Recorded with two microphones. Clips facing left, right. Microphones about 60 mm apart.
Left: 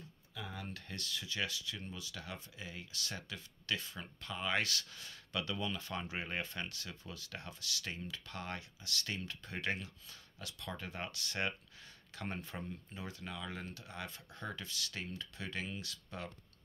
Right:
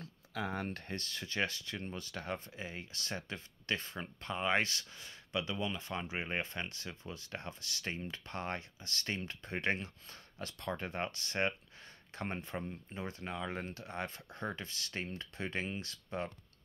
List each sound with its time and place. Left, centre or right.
0.0 s speech: right